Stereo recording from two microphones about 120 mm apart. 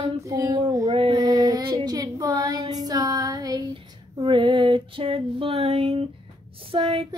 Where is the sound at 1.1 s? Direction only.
30° right (ahead or behind).